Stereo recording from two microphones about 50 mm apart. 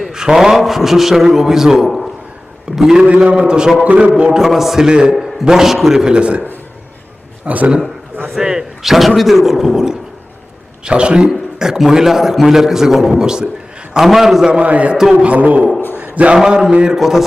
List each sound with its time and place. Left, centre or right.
0.1 s a man's voice: centre
3.0 s a man's voice: right; by 4.9 s centre
4.9 s a man's voice: centre
5.1 s a man's voice: centre
7.4 s a man's voice: right
8.3 s a man's voice: centre
14.5 s a man's voice: right
16.3 s a man's voice: centre
17.0 s a man's voice: centre